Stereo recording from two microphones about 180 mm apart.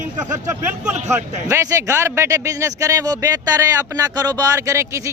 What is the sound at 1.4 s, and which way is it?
A man's voice, 15° right (ahead or behind).